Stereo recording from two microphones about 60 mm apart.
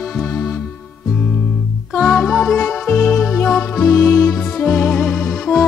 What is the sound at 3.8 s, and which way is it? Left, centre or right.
Music, left.